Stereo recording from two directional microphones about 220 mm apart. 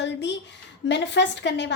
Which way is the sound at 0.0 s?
55° left (ahead or behind).